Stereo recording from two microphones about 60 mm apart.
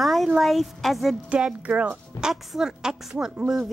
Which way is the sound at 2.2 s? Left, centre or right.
Centre.